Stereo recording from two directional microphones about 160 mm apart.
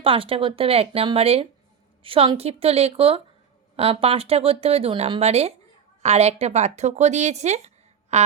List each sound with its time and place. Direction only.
0.0 s a woman's voice: 35° right (ahead or behind)